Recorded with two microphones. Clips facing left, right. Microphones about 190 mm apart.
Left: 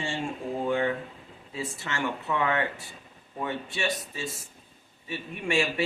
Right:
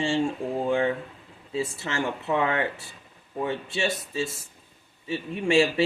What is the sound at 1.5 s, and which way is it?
Speech, 30° right (ahead or behind).